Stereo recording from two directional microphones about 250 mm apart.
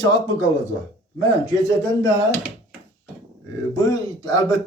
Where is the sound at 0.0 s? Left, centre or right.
Centre.